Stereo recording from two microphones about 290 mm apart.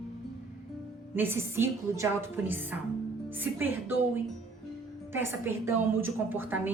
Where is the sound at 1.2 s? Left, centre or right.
Centre.